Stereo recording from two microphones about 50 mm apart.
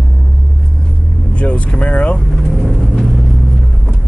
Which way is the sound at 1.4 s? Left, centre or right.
Left.